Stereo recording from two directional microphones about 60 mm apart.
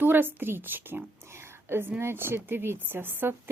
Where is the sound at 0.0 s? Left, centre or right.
Right.